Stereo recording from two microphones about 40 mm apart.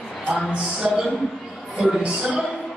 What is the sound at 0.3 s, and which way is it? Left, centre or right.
Music, right.